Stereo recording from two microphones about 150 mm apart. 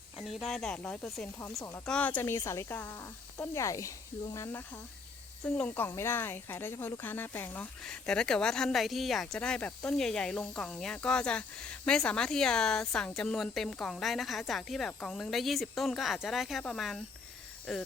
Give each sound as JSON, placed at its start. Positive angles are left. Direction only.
{"t": 0.2, "sound": "speech", "side_deg": 0}